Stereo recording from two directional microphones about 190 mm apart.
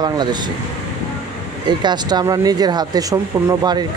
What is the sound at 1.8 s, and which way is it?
Speech, 20° right (ahead or behind).